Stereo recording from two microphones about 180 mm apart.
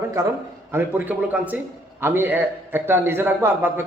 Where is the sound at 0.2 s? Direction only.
20° right (ahead or behind).